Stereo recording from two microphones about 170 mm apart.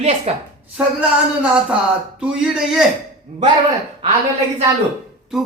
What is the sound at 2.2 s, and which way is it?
Speech, 5° right (ahead or behind).